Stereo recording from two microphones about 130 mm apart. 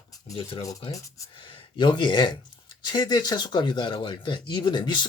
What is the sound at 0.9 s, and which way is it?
Speech, 25° left (ahead or behind).